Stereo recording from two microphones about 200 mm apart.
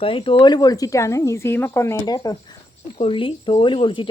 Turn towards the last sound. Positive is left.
turn(degrees=25)  # may be behind; listen again after turning